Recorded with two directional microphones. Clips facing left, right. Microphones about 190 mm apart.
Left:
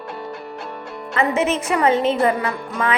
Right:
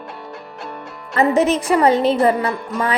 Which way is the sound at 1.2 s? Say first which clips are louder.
Right 5 dB; 35° right (ahead or behind).